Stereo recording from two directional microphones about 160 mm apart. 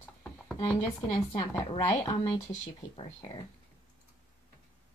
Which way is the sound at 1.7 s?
35° left (ahead or behind).